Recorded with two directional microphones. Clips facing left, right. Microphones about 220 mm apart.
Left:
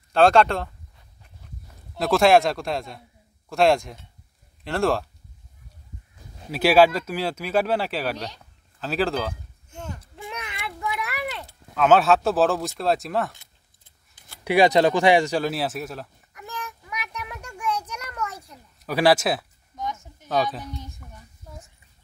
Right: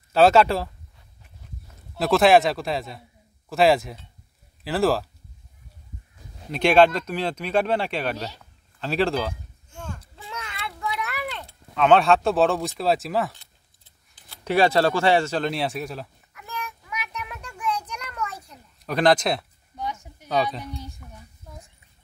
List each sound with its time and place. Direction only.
0.1 s speech: 5° right (ahead or behind)
2.0 s speech: centre (ahead or behind)
6.5 s speech: 5° left (ahead or behind)
9.7 s a sound: 20° left (ahead or behind); by 13.3 s centre (ahead or behind)
14.4 s speech: 15° left (ahead or behind)
16.3 s child singing: 15° left (ahead or behind)
18.1 s a sound: 10° left (ahead or behind)
19.7 s a sound: 10° right (ahead or behind)
20.7 s a woman's voice: 10° right (ahead or behind)